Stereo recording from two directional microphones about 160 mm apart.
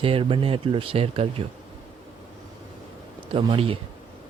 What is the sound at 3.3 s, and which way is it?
Speech, 35° right (ahead or behind).